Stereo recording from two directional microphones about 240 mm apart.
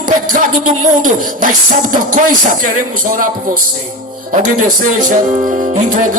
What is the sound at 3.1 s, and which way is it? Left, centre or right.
Music, right.